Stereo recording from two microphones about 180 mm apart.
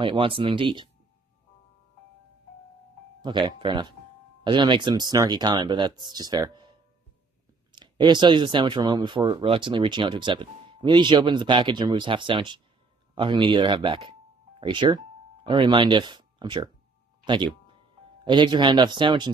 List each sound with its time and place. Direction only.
0.0 s speech: 30° right (ahead or behind)
3.2 s speech: 25° right (ahead or behind)
17.2 s a sound: 25° right (ahead or behind)
18.2 s speech: 25° right (ahead or behind)